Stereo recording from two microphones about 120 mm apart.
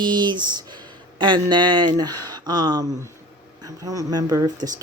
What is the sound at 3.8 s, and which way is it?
Speech, 30° right (ahead or behind).